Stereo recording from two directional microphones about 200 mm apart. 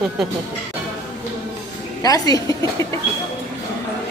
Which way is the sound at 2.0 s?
20° left (ahead or behind).